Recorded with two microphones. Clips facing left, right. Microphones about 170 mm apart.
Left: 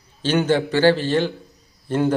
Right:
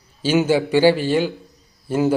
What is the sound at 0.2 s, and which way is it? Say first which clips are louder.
A man's voice: right 2 dB; 10° right (ahead or behind).